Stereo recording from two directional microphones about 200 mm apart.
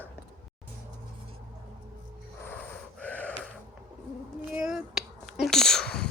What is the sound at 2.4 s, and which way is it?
Gasp, 10° left (ahead or behind).